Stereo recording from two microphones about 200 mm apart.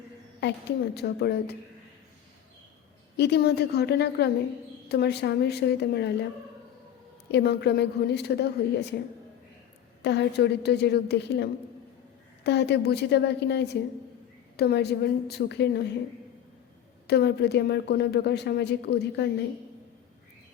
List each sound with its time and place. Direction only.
0.9 s a woman's voice: 55° left (ahead or behind)
3.2 s a woman's voice: 55° left (ahead or behind)
7.3 s a woman's voice: 55° left (ahead or behind)
10.0 s a woman's voice: 60° left (ahead or behind)
17.1 s a woman's voice: 55° left (ahead or behind)